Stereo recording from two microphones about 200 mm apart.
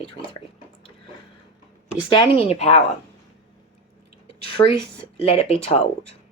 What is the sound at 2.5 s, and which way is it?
Speech, 35° left (ahead or behind).